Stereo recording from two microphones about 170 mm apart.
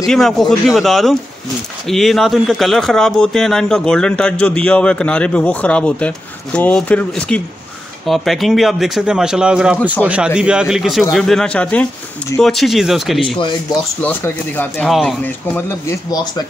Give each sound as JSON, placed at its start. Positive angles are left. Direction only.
{"t": 0.0, "sound": "speech", "side_deg": 0}
{"t": 13.4, "sound": "speech", "side_deg": 25}
{"t": 14.0, "sound": "speech", "side_deg": 10}
{"t": 14.9, "sound": "speech", "side_deg": 0}
{"t": 15.2, "sound": "speech", "side_deg": 10}
{"t": 16.1, "sound": "speech", "side_deg": 25}